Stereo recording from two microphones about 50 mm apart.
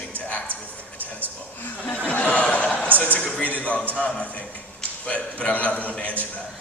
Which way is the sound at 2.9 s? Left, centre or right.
Left.